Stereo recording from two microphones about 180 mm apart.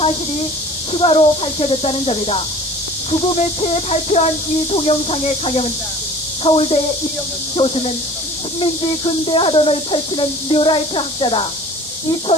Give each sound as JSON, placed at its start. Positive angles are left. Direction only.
{"t": 0.9, "sound": "speech", "side_deg": 30}